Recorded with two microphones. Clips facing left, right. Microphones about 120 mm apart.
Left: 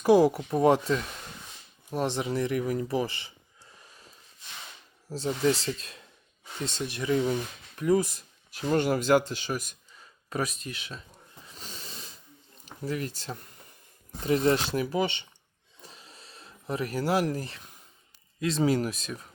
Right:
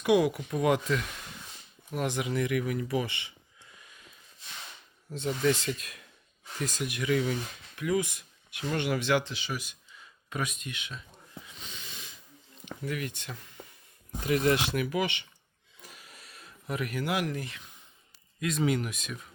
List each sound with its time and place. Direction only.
0.0 s speech: 35° left (ahead or behind)
11.4 s snort: 40° left (ahead or behind)
12.6 s speech: 35° left (ahead or behind)
15.8 s a sound: 30° left (ahead or behind)
18.3 s speech: 30° left (ahead or behind)